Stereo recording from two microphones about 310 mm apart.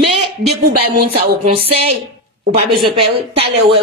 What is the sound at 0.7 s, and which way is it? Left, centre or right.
Speech, right.